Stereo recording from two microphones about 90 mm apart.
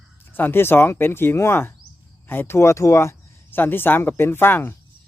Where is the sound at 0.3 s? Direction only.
25° left (ahead or behind).